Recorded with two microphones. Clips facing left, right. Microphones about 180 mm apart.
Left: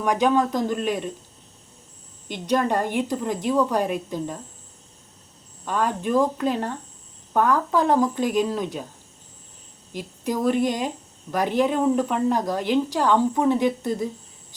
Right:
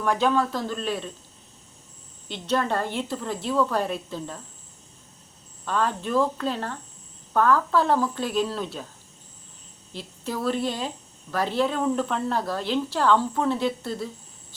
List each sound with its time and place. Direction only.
0.0 s a woman's voice: 15° left (ahead or behind)
2.2 s a woman's voice: 15° left (ahead or behind)
5.6 s a woman's voice: 10° left (ahead or behind)
9.9 s a woman's voice: 15° left (ahead or behind)